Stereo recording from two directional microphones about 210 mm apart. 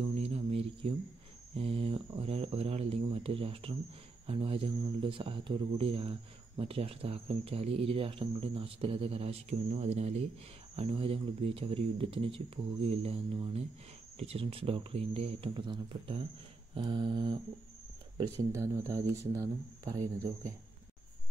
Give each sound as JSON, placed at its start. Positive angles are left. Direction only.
{"t": 0.0, "sound": "a sound", "side_deg": -30}
{"t": 1.5, "sound": "speech", "side_deg": -25}
{"t": 18.5, "sound": "speech", "side_deg": -15}